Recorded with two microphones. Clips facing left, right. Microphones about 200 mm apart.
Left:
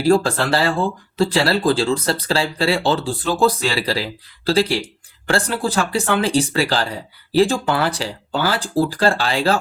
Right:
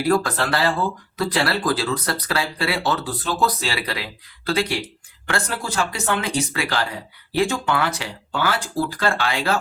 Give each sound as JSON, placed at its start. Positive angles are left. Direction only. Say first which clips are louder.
{"t": 0.0, "sound": "speech", "louder": "left 4 dB", "side_deg": 30}